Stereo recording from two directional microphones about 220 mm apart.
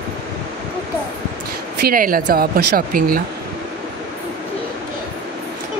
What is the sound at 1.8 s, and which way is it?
Speech, 40° right (ahead or behind).